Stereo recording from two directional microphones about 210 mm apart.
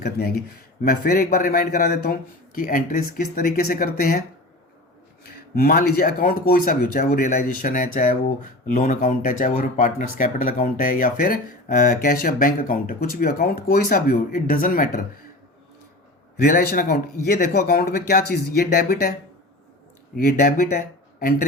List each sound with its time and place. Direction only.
0.0 s speech: 45° left (ahead or behind)
5.2 s speech: 45° left (ahead or behind)
16.4 s speech: 40° left (ahead or behind)
20.1 s speech: 45° left (ahead or behind)